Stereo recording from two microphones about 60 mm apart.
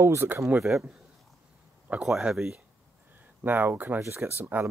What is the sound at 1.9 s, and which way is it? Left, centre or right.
Speech, right.